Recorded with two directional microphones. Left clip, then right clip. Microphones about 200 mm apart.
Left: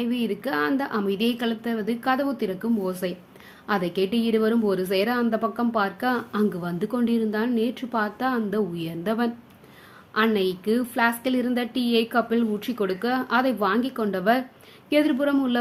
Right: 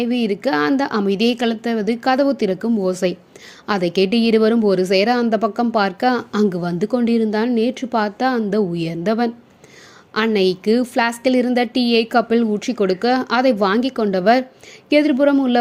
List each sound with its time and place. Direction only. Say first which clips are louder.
0.0 s a woman's voice: right 8 dB; 25° right (ahead or behind)